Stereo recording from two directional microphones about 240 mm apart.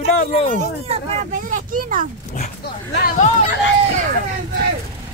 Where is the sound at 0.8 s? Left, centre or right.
Right.